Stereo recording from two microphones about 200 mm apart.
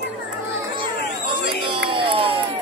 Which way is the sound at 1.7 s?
25° right (ahead or behind).